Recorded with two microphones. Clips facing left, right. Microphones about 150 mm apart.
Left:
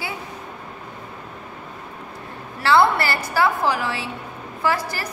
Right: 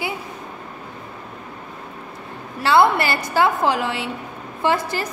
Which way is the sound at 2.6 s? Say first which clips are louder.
Right 1 dB; 20° right (ahead or behind).